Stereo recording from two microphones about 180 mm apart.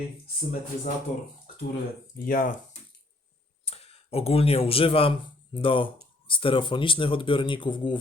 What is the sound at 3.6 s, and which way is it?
Speech, 35° left (ahead or behind).